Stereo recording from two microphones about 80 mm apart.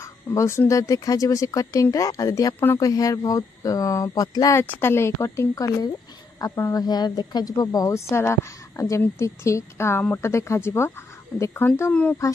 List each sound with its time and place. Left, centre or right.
0.0 s speech: left
4.6 s a woman's voice: left
6.7 s a woman's voice: left
11.9 s speech: centre